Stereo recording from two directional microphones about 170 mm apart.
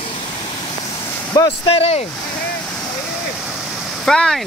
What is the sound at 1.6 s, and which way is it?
Speech, 35° left (ahead or behind).